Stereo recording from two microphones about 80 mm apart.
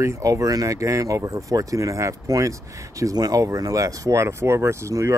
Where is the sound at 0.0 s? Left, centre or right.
Right.